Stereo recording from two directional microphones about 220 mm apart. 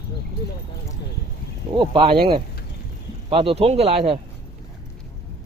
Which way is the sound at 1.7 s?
20° right (ahead or behind).